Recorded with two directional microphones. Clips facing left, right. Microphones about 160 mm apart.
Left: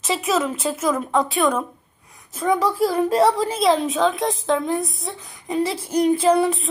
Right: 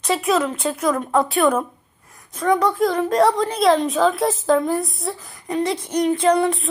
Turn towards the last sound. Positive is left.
turn(degrees=5)  # may be behind; listen again after turning